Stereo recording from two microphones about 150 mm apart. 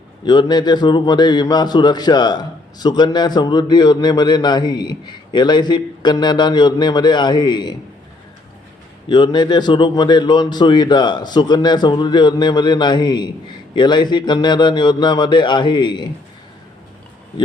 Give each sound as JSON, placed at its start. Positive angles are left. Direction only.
{"t": 0.3, "sound": "a man's voice", "side_deg": 30}
{"t": 9.0, "sound": "a man's voice", "side_deg": 30}